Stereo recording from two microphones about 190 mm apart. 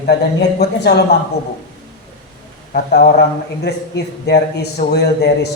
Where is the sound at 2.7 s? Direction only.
55° left (ahead or behind).